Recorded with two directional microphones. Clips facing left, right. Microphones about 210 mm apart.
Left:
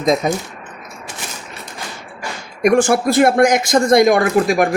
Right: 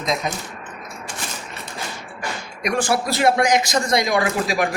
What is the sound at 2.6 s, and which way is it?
Speech, 50° left (ahead or behind).